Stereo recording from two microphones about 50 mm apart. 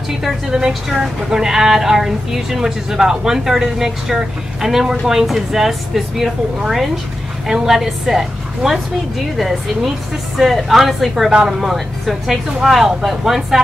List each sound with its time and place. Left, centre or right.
0.5 s a woman's voice: centre
7.4 s a woman's voice: centre